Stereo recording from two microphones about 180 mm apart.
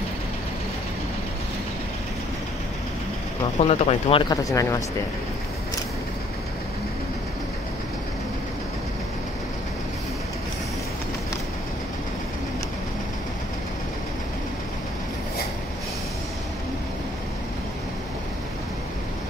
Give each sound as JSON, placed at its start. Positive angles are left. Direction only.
{"t": 3.5, "sound": "speech", "side_deg": 35}